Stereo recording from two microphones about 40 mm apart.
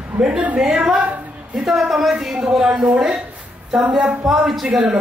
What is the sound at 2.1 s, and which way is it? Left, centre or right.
Music, centre.